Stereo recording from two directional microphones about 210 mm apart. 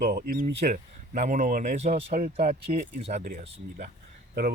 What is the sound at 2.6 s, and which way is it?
Speech, 30° right (ahead or behind).